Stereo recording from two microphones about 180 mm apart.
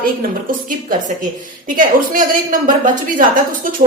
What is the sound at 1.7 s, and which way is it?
A woman's voice, 45° right (ahead or behind).